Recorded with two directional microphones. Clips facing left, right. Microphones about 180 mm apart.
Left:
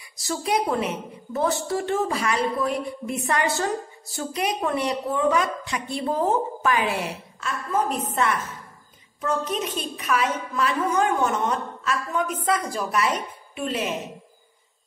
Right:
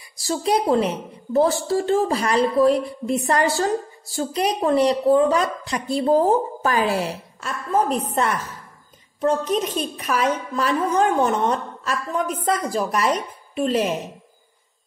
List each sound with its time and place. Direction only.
0.2 s a woman's voice: 35° right (ahead or behind)
10.0 s a woman's voice: 35° right (ahead or behind)